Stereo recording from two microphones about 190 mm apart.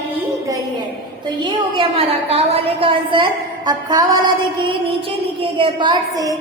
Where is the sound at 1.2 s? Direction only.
25° right (ahead or behind).